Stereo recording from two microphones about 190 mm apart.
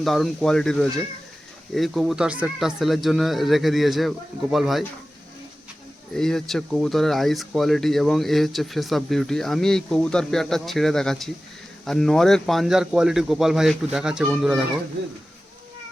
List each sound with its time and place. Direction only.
0.0 s speech: centre (ahead or behind)
6.1 s speech: centre (ahead or behind)